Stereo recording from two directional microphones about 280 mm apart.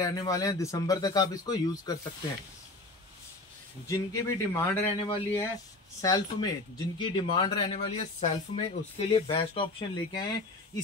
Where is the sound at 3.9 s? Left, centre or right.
Centre.